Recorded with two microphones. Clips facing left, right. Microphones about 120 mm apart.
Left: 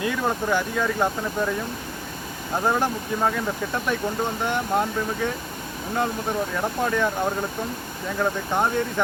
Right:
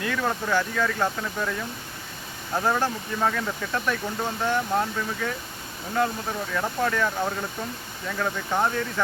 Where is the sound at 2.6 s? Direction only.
15° left (ahead or behind).